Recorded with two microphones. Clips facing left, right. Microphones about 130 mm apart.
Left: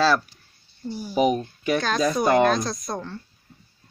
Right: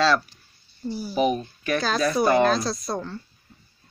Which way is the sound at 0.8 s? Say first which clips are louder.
Right 2 dB; 5° right (ahead or behind).